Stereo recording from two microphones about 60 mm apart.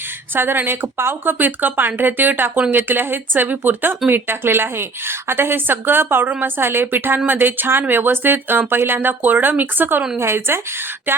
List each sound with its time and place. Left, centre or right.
0.3 s speech: right